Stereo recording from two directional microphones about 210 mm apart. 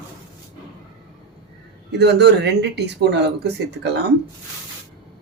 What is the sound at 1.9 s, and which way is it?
Speech, 55° right (ahead or behind).